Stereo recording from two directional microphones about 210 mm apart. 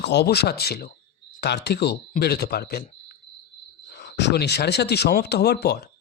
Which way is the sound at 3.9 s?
50° left (ahead or behind).